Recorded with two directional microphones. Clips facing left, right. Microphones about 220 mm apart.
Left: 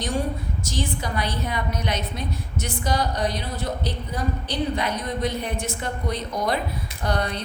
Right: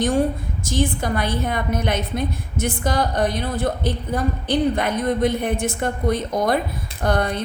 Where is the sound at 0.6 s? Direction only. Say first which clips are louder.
Right 8 dB; 50° right (ahead or behind).